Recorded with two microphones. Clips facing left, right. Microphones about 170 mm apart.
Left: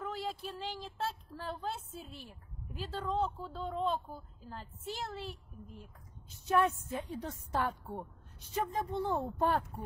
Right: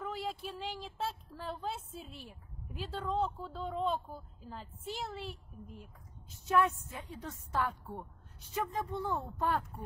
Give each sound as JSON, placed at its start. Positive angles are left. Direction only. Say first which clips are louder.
{"t": 0.0, "sound": "speech", "louder": "even", "side_deg": 0}
{"t": 6.5, "sound": "a woman's voice", "louder": "even", "side_deg": 35}